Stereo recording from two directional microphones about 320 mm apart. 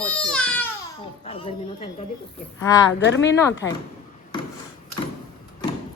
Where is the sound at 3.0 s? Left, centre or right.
Left.